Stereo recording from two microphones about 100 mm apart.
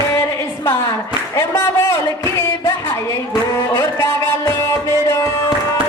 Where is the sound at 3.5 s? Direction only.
25° left (ahead or behind).